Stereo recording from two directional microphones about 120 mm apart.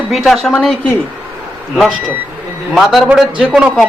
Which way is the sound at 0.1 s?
Centre (ahead or behind).